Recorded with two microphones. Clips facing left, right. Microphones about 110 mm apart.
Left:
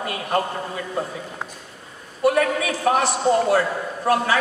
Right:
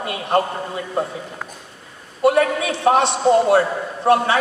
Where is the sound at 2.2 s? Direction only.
25° right (ahead or behind).